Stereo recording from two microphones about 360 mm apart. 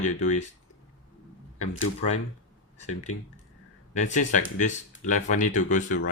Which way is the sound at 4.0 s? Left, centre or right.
Centre.